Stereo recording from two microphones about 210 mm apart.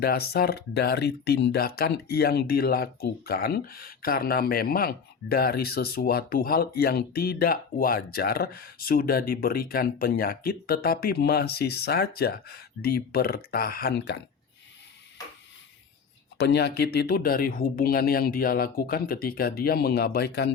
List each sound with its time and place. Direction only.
0.0 s speech: 45° left (ahead or behind)
16.4 s speech: 50° left (ahead or behind)